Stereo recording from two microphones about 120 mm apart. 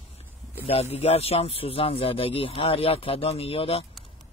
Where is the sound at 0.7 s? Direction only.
60° left (ahead or behind).